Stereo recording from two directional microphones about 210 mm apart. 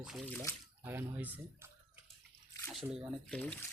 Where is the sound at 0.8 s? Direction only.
10° right (ahead or behind).